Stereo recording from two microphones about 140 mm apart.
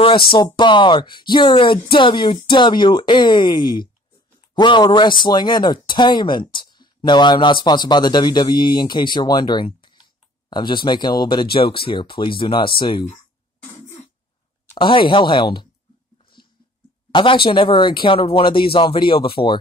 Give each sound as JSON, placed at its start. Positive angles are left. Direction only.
{"t": 0.0, "sound": "speech", "side_deg": 40}
{"t": 14.7, "sound": "speech", "side_deg": 35}
{"t": 16.2, "sound": "a sound", "side_deg": 35}
{"t": 17.1, "sound": "speech", "side_deg": 35}